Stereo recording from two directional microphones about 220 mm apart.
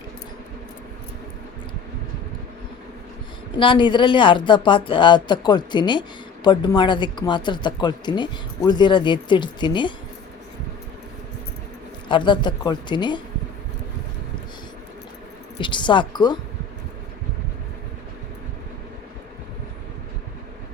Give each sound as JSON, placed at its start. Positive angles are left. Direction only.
{"t": 3.6, "sound": "speech", "side_deg": 20}
{"t": 12.0, "sound": "speech", "side_deg": 20}
{"t": 15.5, "sound": "speech", "side_deg": 20}